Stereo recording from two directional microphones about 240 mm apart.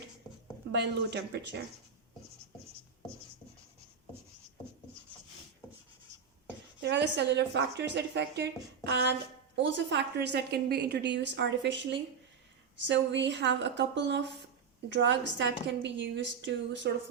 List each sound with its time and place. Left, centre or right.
0.7 s a woman's voice: right
6.8 s a woman's voice: right